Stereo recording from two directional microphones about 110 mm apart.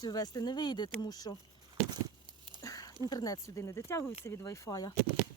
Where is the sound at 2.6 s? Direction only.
35° left (ahead or behind).